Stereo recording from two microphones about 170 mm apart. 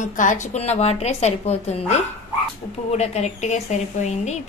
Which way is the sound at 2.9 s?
40° left (ahead or behind).